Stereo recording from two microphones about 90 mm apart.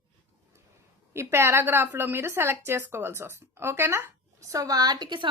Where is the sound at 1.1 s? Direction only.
30° right (ahead or behind).